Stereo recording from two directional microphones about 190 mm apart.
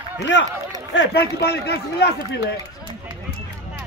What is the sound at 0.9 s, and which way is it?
A man's voice, 60° left (ahead or behind).